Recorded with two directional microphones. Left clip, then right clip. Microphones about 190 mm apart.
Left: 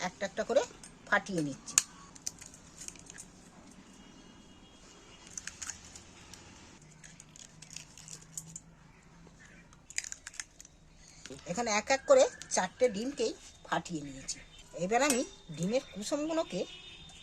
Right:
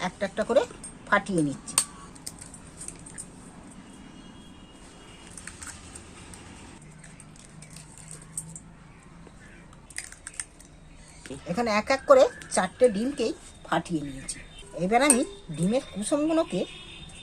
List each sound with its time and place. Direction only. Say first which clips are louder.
0.0 s speech: right 6 dB; 15° left (ahead or behind)
11.4 s a woman's voice: right 6 dB; 15° left (ahead or behind)